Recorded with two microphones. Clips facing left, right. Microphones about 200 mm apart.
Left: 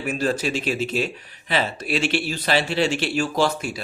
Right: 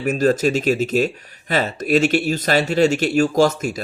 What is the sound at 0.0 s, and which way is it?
Speech, 40° right (ahead or behind).